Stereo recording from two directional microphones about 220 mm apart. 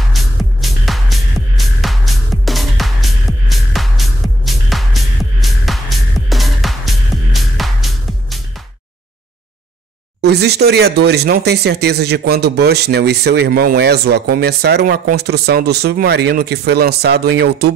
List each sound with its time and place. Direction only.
0.1 s music: centre (ahead or behind)
10.2 s speech: 50° right (ahead or behind)